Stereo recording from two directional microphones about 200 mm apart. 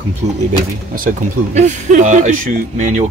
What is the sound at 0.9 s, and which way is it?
Speech, 45° right (ahead or behind).